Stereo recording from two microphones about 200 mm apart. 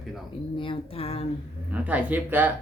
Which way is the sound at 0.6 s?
25° left (ahead or behind).